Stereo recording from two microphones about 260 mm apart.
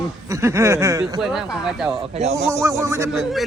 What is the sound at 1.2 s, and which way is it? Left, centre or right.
Speech, centre.